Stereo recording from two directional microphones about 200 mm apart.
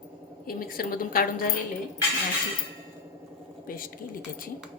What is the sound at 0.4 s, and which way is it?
Speech, 50° left (ahead or behind).